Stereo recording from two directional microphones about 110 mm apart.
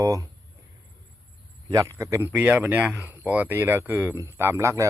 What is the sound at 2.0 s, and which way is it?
A man's voice, 25° right (ahead or behind).